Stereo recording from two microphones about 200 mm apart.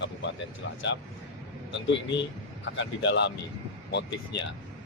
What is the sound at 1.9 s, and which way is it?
Speech, 65° left (ahead or behind).